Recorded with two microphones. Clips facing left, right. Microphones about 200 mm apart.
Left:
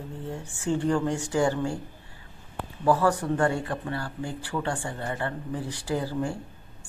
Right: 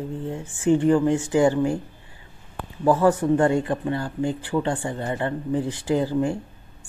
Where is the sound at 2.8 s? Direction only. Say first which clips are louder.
Right 5 dB; 15° right (ahead or behind).